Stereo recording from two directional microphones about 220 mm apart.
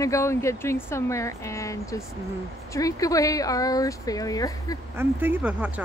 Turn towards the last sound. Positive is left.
turn(degrees=-5)  # may be behind; listen again after turning